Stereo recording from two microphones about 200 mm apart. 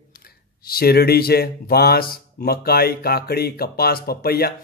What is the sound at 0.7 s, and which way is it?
A man's voice, 50° left (ahead or behind).